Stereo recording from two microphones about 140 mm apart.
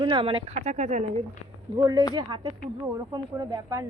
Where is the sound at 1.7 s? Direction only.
25° right (ahead or behind).